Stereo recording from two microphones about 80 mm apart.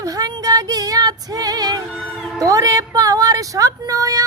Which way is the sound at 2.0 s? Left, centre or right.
Centre.